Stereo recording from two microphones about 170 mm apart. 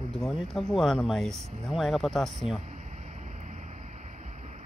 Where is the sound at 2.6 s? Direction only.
45° right (ahead or behind).